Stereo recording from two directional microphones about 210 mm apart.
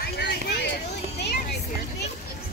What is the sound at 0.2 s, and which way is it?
Hubbub, 50° left (ahead or behind).